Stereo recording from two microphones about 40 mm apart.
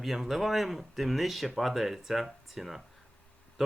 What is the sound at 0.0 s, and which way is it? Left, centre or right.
Speech, centre.